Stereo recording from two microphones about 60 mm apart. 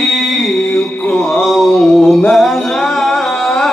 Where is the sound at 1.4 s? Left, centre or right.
Centre.